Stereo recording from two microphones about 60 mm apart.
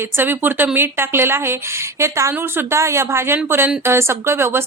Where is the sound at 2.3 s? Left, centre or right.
Right.